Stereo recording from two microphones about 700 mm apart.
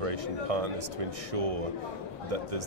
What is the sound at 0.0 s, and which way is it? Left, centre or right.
Speech, right.